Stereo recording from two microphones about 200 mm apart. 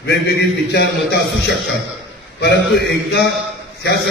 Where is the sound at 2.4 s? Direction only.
60° left (ahead or behind).